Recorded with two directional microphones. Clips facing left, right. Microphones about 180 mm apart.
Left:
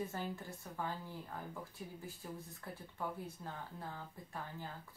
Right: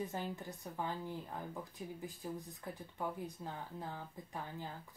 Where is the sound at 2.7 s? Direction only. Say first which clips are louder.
Right 2 dB; 15° right (ahead or behind).